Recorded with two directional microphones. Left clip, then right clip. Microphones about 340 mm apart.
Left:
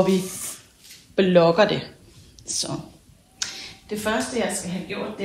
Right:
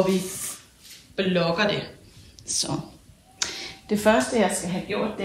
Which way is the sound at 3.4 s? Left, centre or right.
Right.